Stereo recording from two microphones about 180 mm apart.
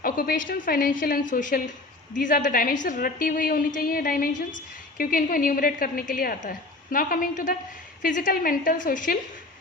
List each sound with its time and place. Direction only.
0.0 s a woman's voice: 50° left (ahead or behind)